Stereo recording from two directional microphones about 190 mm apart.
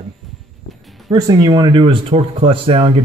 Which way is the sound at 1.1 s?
20° right (ahead or behind).